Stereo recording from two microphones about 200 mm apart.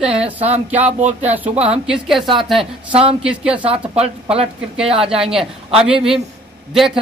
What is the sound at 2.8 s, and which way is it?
Speech, 25° right (ahead or behind).